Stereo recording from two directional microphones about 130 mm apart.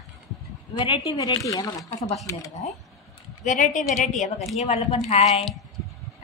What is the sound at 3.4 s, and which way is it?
Speech, 80° left.